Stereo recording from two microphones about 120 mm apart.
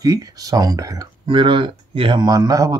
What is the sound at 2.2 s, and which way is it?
Speech, 30° right (ahead or behind).